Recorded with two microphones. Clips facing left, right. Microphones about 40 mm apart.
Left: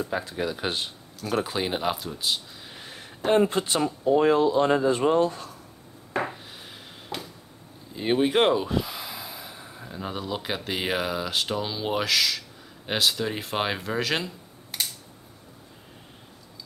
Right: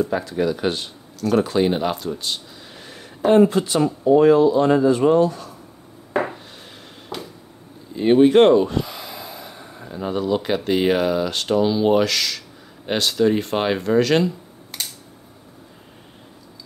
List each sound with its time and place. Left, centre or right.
0.2 s speech: centre
3.4 s speech: left
3.8 s speech: centre
4.2 s speech: left
6.1 s a sound: centre
7.9 s speech: centre